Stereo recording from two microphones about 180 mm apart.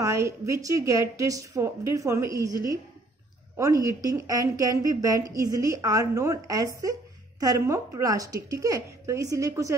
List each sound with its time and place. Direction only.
0.0 s a woman's voice: 15° right (ahead or behind)